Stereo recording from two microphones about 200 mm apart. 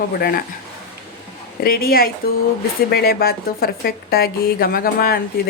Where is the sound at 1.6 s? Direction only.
50° left (ahead or behind).